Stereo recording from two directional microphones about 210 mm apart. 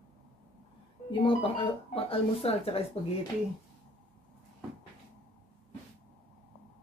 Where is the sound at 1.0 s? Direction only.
25° left (ahead or behind).